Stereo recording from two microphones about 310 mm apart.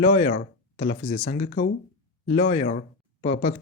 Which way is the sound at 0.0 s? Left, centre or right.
Left.